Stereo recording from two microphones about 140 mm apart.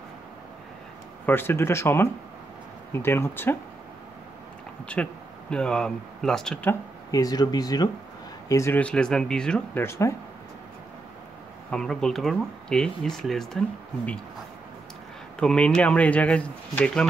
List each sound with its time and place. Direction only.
1.2 s speech: 15° left (ahead or behind)
5.0 s speech: 5° left (ahead or behind)
7.1 s speech: 25° left (ahead or behind)
8.7 s speech: 5° left (ahead or behind)
9.8 s speech: 20° left (ahead or behind)
11.7 s speech: 5° left (ahead or behind)
15.4 s speech: 5° left (ahead or behind)